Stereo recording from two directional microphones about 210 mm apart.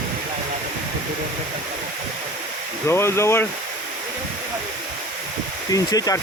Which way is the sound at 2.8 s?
10° left (ahead or behind).